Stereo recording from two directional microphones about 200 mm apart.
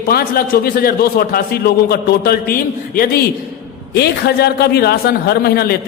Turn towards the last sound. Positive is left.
turn(degrees=50)  # may be behind; listen again after turning